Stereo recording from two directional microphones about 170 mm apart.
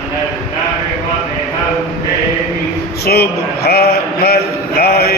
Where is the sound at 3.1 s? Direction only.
70° left (ahead or behind).